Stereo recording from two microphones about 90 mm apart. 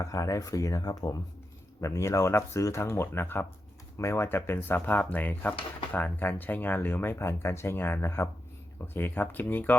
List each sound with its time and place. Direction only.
0.0 s speech: 40° left (ahead or behind)
1.8 s speech: 35° left (ahead or behind); by 9.7 s 20° left (ahead or behind)